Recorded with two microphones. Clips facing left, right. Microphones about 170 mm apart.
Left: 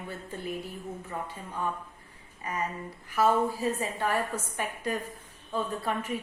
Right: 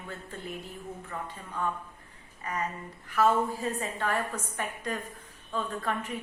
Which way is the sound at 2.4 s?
10° left (ahead or behind).